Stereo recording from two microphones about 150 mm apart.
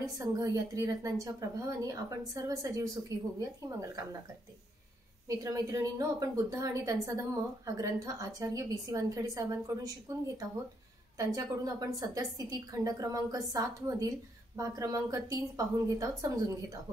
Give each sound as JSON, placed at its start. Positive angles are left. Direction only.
{"t": 0.0, "sound": "a woman's voice", "side_deg": -20}
{"t": 5.4, "sound": "a woman's voice", "side_deg": -25}